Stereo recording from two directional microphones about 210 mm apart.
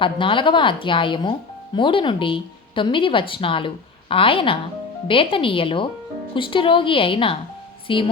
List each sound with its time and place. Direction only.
0.0 s speech: 25° left (ahead or behind)